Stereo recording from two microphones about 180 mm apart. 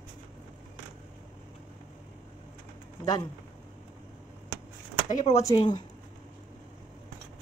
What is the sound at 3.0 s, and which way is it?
Speech, 20° left (ahead or behind).